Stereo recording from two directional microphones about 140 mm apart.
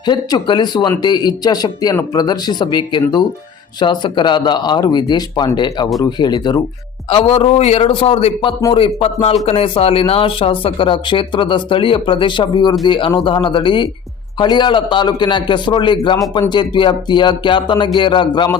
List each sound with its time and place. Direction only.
0.0 s speech: 30° left (ahead or behind)
7.1 s a man's voice: 40° left (ahead or behind)